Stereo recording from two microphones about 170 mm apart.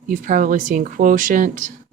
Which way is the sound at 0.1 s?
55° right (ahead or behind).